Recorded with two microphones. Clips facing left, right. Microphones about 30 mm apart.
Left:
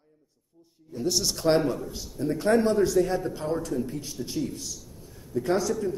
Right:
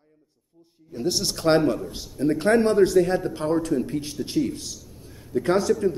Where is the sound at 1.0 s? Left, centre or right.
Right.